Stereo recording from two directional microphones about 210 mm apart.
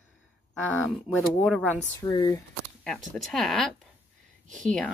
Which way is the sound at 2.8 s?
Centre (ahead or behind).